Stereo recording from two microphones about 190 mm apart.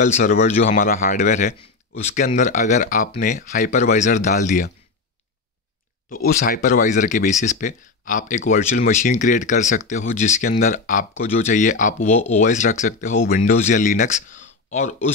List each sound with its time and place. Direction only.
0.0 s speech: 40° left (ahead or behind)
0.7 s speech: 50° left (ahead or behind)
6.0 s speech: 50° left (ahead or behind)